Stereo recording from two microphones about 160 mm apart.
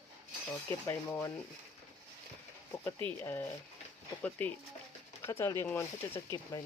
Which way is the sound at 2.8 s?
15° left (ahead or behind).